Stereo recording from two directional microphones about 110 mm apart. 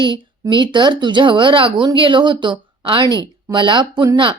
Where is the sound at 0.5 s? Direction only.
45° right (ahead or behind).